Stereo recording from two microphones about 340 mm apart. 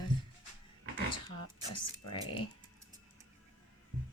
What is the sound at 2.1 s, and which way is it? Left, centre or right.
Speech, centre.